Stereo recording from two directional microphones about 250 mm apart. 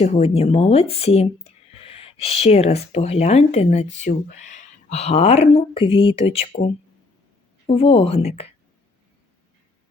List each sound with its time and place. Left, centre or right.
0.0 s speech: left
7.7 s speech: left